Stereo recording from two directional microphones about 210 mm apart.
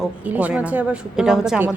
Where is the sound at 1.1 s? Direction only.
5° right (ahead or behind).